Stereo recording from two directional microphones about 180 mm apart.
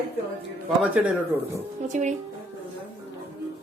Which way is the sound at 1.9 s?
40° right (ahead or behind).